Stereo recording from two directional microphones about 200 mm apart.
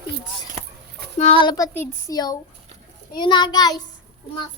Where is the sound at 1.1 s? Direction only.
25° left (ahead or behind).